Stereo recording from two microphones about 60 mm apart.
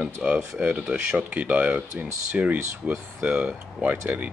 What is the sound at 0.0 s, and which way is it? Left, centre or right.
Speech, centre.